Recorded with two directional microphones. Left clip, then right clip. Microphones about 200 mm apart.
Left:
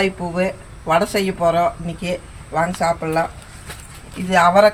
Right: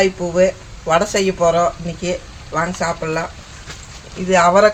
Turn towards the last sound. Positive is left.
turn(degrees=-20)  # may be behind; listen again after turning